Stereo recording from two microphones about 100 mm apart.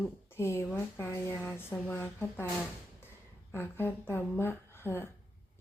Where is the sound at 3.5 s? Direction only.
20° left (ahead or behind).